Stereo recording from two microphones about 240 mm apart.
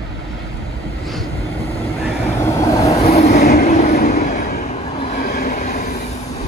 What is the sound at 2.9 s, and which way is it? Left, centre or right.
Train, left.